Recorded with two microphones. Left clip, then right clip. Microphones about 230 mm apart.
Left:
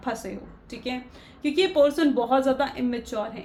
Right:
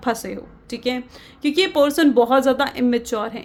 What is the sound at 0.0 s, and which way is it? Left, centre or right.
A woman's voice, right.